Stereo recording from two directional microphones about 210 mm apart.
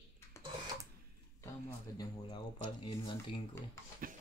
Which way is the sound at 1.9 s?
15° left (ahead or behind).